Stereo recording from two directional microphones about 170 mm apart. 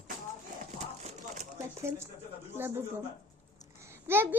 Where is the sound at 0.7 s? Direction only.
40° right (ahead or behind).